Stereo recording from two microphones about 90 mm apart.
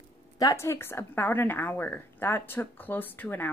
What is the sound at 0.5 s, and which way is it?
A woman's voice, 30° left (ahead or behind).